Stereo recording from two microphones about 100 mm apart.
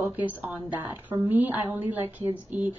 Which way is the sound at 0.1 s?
15° right (ahead or behind).